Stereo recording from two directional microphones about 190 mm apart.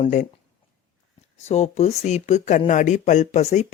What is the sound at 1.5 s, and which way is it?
Speech, 35° left (ahead or behind).